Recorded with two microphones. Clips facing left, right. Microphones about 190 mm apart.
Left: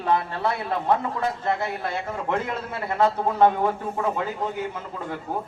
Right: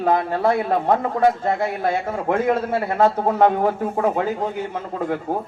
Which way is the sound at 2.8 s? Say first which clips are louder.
Right 4 dB; 45° right (ahead or behind).